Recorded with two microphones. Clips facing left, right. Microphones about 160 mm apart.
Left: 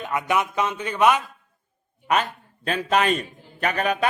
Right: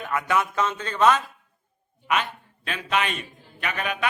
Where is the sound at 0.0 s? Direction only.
20° left (ahead or behind).